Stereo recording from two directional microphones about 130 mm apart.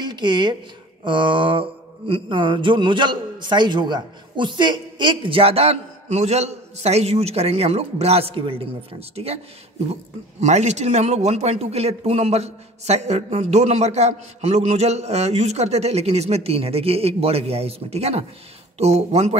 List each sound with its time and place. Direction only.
0.0 s speech: 35° right (ahead or behind)
1.0 s mantra: 40° right (ahead or behind)
9.1 s speech: 50° right (ahead or behind)
10.4 s a man's voice: 60° right (ahead or behind)